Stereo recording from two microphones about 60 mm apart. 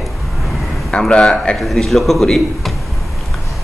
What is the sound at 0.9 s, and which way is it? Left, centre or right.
Speech, centre.